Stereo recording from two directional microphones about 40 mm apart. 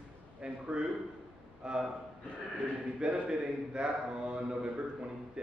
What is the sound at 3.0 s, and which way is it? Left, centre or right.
Speech, right.